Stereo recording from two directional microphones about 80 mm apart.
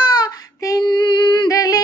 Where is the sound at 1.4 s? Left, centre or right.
Left.